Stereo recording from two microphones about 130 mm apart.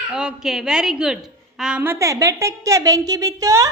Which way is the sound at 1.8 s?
20° right (ahead or behind).